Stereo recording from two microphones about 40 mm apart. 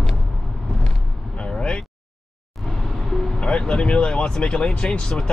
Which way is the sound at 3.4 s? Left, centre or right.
Left.